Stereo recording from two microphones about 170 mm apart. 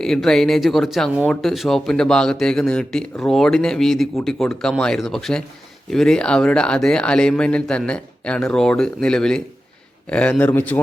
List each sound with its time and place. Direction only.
0.0 s a man's voice: centre (ahead or behind)